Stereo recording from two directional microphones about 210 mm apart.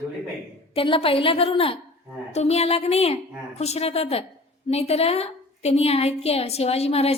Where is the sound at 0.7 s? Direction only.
25° left (ahead or behind).